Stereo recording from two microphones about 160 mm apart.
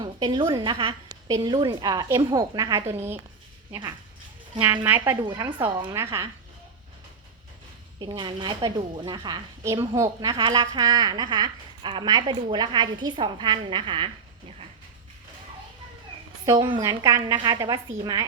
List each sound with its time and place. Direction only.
0.0 s a woman's voice: 30° right (ahead or behind)
5.2 s a woman's voice: 30° right (ahead or behind)
5.9 s speech: 15° right (ahead or behind)
7.9 s a woman's voice: 30° right (ahead or behind)
16.5 s a woman's voice: 25° right (ahead or behind)